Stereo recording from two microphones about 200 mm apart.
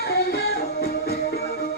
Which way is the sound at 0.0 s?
55° left (ahead or behind).